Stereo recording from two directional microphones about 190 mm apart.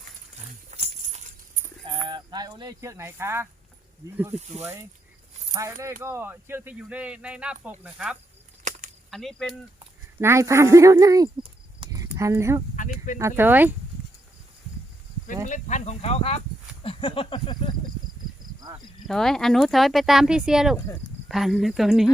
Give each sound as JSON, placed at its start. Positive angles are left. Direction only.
{"t": 0.7, "sound": "dog", "side_deg": -35}
{"t": 2.0, "sound": "speech", "side_deg": -20}
{"t": 4.4, "sound": "speech", "side_deg": -35}
{"t": 4.6, "sound": "speech", "side_deg": -15}
{"t": 10.2, "sound": "speech", "side_deg": -15}
{"t": 11.8, "sound": "a sound", "side_deg": -20}
{"t": 12.7, "sound": "a sound", "side_deg": 40}
{"t": 13.1, "sound": "speech", "side_deg": -15}
{"t": 15.4, "sound": "speech", "side_deg": 40}
{"t": 16.8, "sound": "a sound", "side_deg": 30}
{"t": 19.0, "sound": "speech", "side_deg": 0}